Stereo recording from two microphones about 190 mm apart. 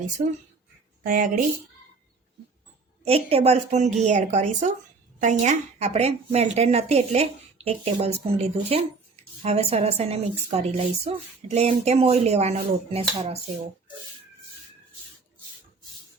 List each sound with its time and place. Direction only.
0.2 s a woman's voice: 40° right (ahead or behind)
3.0 s a woman's voice: 30° right (ahead or behind)